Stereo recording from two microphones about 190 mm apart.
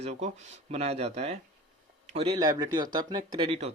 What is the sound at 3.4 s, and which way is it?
Speech, 30° right (ahead or behind).